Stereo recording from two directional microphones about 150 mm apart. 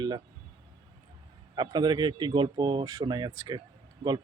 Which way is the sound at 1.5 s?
30° right (ahead or behind).